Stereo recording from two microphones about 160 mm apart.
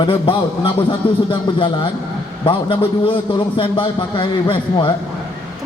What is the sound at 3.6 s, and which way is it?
A man's voice, 35° left (ahead or behind).